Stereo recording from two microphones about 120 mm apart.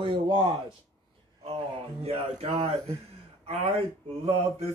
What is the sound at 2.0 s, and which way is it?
Speech, 55° right (ahead or behind).